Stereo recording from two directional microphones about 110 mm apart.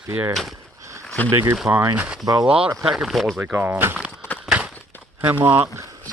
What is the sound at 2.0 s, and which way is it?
Speech, 10° right (ahead or behind).